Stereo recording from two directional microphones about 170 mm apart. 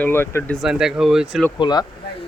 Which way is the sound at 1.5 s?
25° left (ahead or behind).